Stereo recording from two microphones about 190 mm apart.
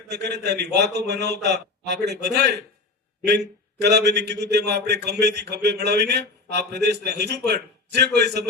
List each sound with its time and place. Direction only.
0.1 s a man's voice: 60° right (ahead or behind)